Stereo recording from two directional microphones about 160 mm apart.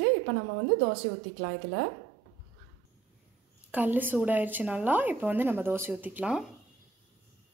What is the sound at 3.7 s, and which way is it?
A woman's voice, 10° right (ahead or behind).